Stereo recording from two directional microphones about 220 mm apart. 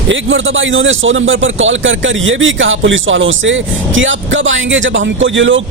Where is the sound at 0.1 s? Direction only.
60° right (ahead or behind).